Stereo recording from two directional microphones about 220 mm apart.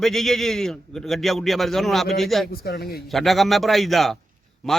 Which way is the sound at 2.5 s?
45° left (ahead or behind).